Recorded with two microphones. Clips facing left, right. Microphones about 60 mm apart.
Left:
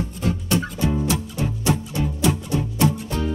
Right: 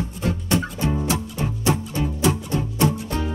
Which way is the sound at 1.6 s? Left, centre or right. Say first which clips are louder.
Right 1 dB; right.